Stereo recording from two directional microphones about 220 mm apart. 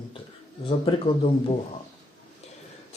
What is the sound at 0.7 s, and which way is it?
Speech, 25° left (ahead or behind).